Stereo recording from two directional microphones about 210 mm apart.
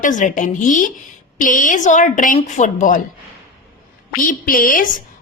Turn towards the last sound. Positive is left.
turn(degrees=40)  # may be behind; listen again after turning